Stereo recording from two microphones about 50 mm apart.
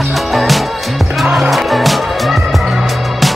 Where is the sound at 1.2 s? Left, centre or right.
Centre.